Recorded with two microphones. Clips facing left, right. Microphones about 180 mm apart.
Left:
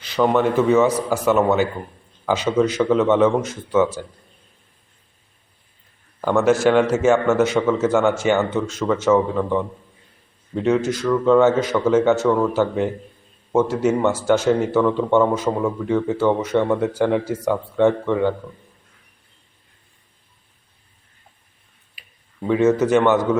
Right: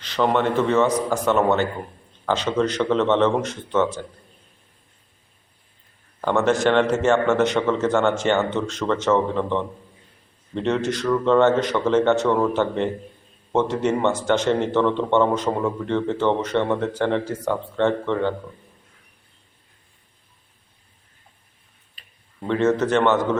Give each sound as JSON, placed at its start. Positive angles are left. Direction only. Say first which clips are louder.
{"t": 0.0, "sound": "a man's voice", "louder": "left 3 dB", "side_deg": 10}
{"t": 6.2, "sound": "a man's voice", "louder": "left 3 dB", "side_deg": 5}
{"t": 21.9, "sound": "speech", "louder": "left 5 dB", "side_deg": 10}